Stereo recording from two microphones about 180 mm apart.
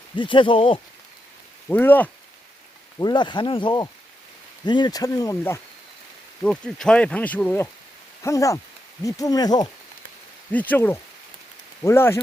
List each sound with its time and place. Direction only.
0.2 s speech: 25° left (ahead or behind)
1.6 s speech: 10° left (ahead or behind)
3.0 s speech: 25° left (ahead or behind)
6.4 s speech: 5° left (ahead or behind); by 9.6 s 20° left (ahead or behind)
10.5 s speech: 10° left (ahead or behind)